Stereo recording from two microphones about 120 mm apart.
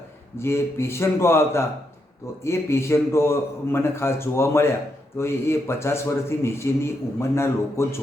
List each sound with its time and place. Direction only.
0.3 s a man's voice: 20° left (ahead or behind)